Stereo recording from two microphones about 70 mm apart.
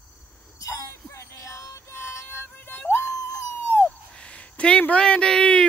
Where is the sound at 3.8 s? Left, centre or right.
Centre.